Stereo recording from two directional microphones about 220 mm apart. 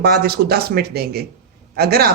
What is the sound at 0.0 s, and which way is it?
Speech, 45° right (ahead or behind).